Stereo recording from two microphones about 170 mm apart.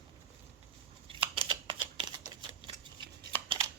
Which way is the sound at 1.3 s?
30° right (ahead or behind).